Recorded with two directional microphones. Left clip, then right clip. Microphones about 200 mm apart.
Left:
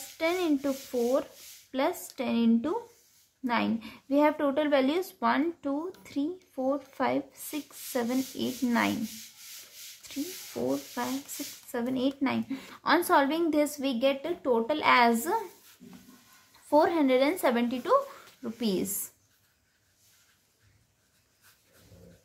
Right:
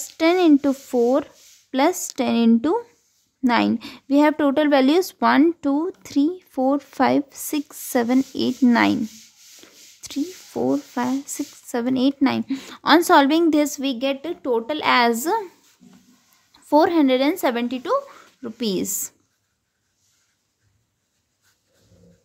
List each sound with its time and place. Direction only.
0.2 s speech: 55° right (ahead or behind)
10.0 s a woman's voice: 55° right (ahead or behind)
16.6 s a woman's voice: 50° right (ahead or behind)